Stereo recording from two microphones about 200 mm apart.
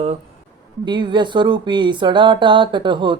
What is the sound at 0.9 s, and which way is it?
Speech, 25° right (ahead or behind).